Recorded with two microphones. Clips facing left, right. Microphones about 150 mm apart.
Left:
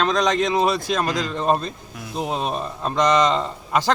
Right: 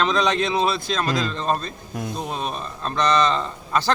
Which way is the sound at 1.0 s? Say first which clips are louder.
Left 1 dB; 15° left (ahead or behind).